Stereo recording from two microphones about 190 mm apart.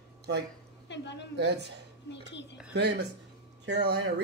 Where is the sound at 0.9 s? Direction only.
65° left (ahead or behind).